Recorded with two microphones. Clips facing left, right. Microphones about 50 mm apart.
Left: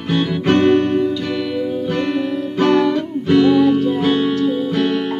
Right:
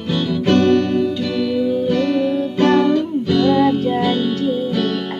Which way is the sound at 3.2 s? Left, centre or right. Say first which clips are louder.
Left 4 dB; left.